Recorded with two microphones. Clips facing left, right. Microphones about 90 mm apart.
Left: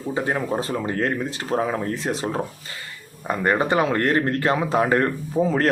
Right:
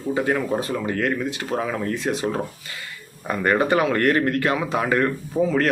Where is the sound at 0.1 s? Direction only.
25° left (ahead or behind).